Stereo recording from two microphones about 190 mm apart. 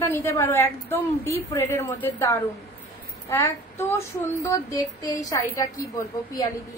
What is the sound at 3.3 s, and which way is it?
Child singing, 15° left (ahead or behind).